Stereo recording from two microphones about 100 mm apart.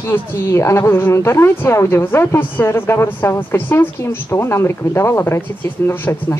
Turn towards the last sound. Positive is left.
turn(degrees=25)  # may be behind; listen again after turning